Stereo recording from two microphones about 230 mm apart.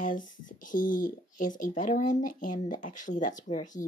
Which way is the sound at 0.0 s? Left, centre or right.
Left.